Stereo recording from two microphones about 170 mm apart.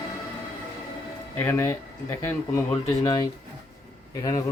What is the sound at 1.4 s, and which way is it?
Speech, 15° left (ahead or behind).